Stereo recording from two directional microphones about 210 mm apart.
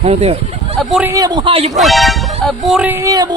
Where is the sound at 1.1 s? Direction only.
20° right (ahead or behind).